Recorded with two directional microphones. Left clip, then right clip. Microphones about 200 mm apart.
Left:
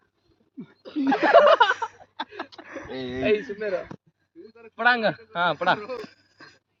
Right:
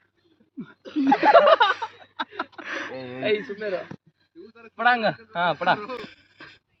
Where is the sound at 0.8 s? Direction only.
60° right (ahead or behind).